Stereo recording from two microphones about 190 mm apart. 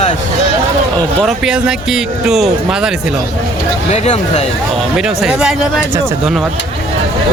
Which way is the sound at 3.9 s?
35° left (ahead or behind).